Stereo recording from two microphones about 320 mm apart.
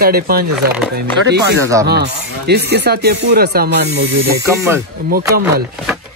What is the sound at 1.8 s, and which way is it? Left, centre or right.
Speech, right.